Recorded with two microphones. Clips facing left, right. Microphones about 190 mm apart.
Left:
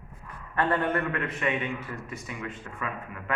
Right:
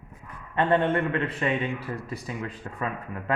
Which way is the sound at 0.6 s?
25° right (ahead or behind).